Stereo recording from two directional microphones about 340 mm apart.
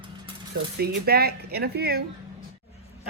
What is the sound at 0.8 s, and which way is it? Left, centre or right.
Speech, right.